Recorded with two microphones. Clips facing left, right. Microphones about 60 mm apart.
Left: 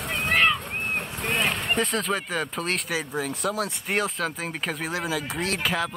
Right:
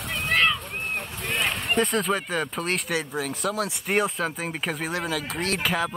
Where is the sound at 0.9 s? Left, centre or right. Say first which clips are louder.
Left 2 dB; left.